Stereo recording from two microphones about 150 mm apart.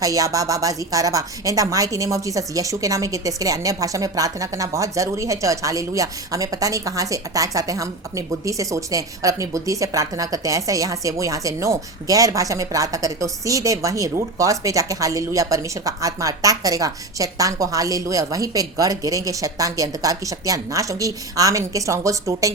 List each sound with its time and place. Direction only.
0.0 s speech: 20° right (ahead or behind)